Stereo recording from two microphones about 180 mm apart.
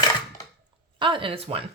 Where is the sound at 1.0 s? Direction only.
25° right (ahead or behind).